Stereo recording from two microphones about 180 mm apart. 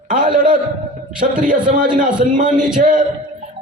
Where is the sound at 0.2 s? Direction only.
50° right (ahead or behind).